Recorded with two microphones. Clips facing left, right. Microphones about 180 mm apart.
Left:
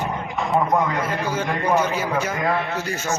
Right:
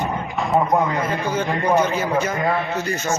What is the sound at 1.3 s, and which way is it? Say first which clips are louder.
A man's voice: right 2 dB; 10° left (ahead or behind).